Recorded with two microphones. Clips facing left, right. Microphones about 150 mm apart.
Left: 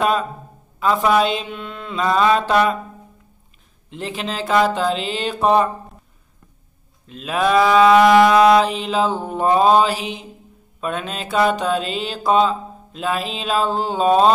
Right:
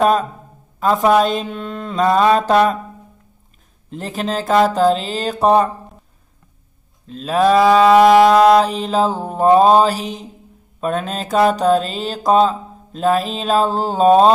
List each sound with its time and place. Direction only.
0.0 s mantra: 45° right (ahead or behind)
3.9 s mantra: 40° right (ahead or behind)
7.1 s mantra: 35° right (ahead or behind)